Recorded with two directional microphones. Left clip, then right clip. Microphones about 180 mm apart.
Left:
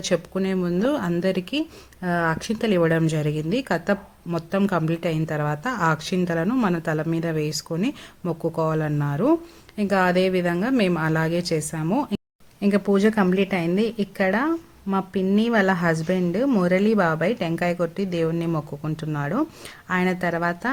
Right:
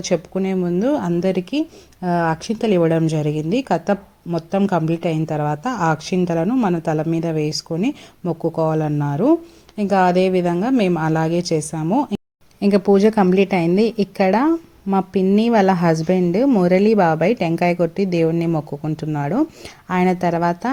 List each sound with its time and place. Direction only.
0.0 s speech: centre (ahead or behind)
12.5 s a woman's voice: 15° right (ahead or behind)